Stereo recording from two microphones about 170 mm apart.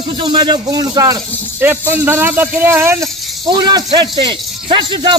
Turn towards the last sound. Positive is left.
turn(degrees=-30)  # may be behind; listen again after turning